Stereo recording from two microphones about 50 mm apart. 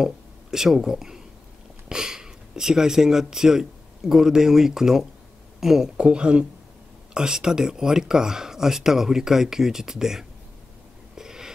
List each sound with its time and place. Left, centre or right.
0.0 s speech: centre
5.9 s speech: centre
11.1 s snort: centre